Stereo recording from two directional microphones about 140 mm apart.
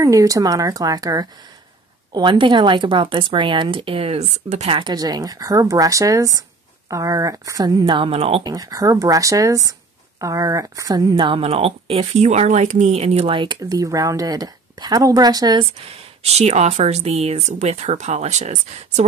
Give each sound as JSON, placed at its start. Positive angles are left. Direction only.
{"t": 0.0, "sound": "speech", "side_deg": -25}
{"t": 4.7, "sound": "speech", "side_deg": -30}
{"t": 8.5, "sound": "speech", "side_deg": -25}
{"t": 16.3, "sound": "speech", "side_deg": -50}